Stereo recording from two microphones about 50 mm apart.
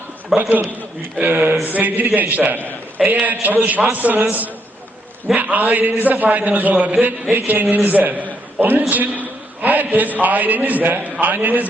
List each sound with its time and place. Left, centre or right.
0.3 s a man's voice: centre
0.8 s a man's voice: right